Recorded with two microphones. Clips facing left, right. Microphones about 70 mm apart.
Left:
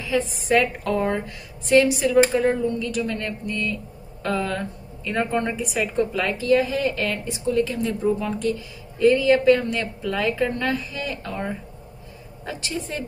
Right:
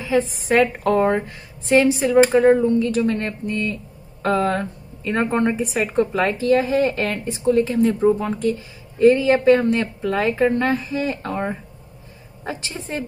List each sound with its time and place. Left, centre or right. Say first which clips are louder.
0.0 s a woman's voice: right 4 dB; right